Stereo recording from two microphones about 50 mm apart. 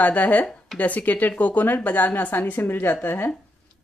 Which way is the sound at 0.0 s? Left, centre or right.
Left.